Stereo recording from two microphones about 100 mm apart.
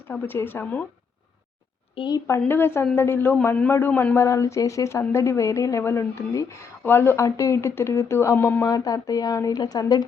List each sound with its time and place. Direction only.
0.1 s speech: 20° left (ahead or behind)
2.0 s a woman's voice: 45° left (ahead or behind)
2.5 s speech: 25° left (ahead or behind)
8.6 s speech: 40° left (ahead or behind)